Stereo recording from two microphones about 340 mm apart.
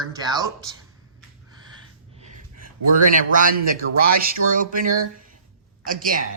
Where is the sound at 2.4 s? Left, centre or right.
Right.